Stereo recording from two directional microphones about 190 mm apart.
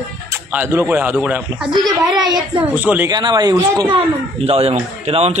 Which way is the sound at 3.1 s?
20° right (ahead or behind).